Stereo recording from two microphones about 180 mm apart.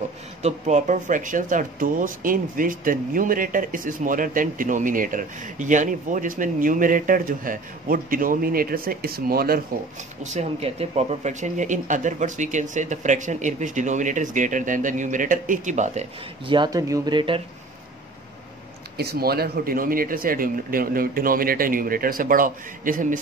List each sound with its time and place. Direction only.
0.4 s speech: 40° right (ahead or behind); by 9.6 s 55° right (ahead or behind)
10.2 s speech: 35° right (ahead or behind)
16.5 s speech: 20° right (ahead or behind)
18.9 s speech: 60° right (ahead or behind)